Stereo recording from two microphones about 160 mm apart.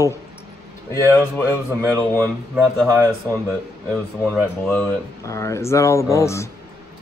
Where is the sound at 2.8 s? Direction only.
15° right (ahead or behind).